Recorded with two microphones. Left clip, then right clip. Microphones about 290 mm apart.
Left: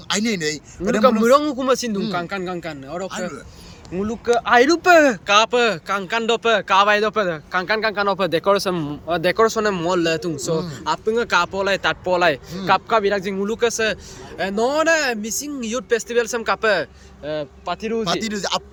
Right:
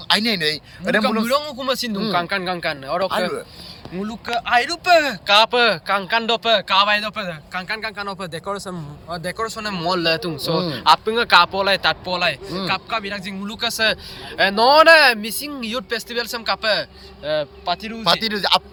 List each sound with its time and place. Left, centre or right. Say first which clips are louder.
0.1 s a man's voice: right 4 dB; centre
1.2 s a man's voice: left 5 dB; centre
3.9 s a man's voice: left 5 dB; centre
18.0 s a man's voice: right 4 dB; centre